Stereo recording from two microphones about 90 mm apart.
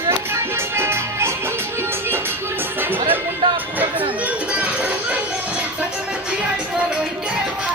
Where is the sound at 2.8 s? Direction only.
20° right (ahead or behind).